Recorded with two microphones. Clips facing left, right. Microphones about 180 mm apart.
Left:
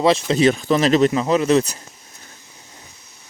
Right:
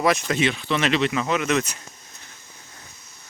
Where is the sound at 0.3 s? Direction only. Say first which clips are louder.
Left 7 dB; 35° left (ahead or behind).